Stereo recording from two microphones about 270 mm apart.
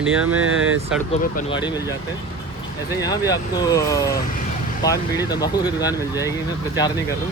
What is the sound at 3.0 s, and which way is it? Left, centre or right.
Speech, centre.